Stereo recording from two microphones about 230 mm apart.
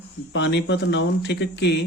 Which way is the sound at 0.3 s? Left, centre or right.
Left.